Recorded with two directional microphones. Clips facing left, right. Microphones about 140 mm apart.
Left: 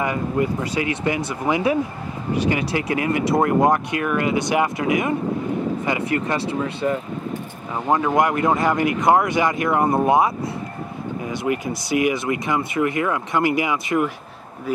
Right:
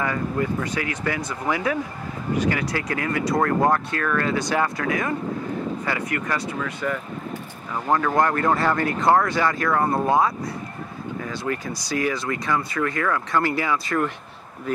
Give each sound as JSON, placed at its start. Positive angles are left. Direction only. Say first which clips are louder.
{"t": 0.0, "sound": "speech", "louder": "left 3 dB", "side_deg": 20}